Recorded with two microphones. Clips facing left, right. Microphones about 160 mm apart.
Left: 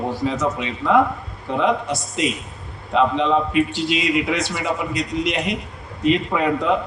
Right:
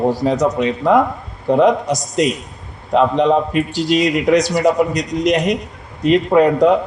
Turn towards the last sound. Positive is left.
turn(degrees=-40)  # may be behind; listen again after turning